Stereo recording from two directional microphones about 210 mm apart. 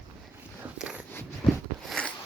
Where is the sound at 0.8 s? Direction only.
5° right (ahead or behind).